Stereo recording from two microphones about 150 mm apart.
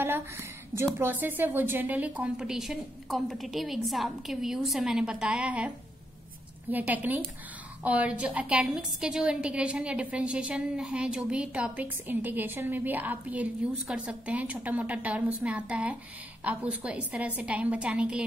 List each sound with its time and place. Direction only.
0.0 s a sound: 15° right (ahead or behind)
0.9 s a woman's voice: 15° right (ahead or behind)
6.7 s a woman's voice: 10° right (ahead or behind)